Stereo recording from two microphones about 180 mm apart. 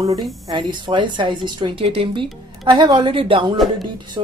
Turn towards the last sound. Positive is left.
turn(degrees=-25)  # may be behind; listen again after turning